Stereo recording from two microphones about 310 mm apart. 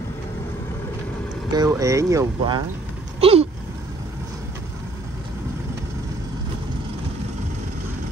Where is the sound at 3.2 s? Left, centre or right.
Centre.